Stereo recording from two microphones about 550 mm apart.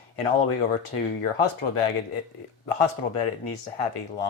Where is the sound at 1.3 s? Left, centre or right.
Left.